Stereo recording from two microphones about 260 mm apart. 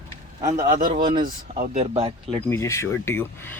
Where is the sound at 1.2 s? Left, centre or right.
Right.